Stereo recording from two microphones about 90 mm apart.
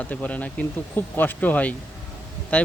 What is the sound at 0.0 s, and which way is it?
A man's voice, 20° left (ahead or behind).